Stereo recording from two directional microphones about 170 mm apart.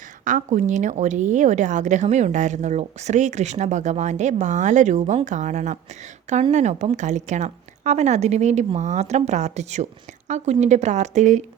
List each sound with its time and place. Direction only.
0.3 s a woman's voice: 45° right (ahead or behind)